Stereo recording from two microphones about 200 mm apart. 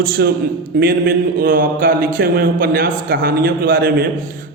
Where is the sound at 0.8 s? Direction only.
50° right (ahead or behind).